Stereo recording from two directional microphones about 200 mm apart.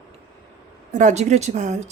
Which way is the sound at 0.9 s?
40° right (ahead or behind).